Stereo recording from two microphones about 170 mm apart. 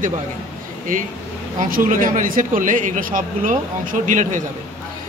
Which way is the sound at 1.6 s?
50° right (ahead or behind).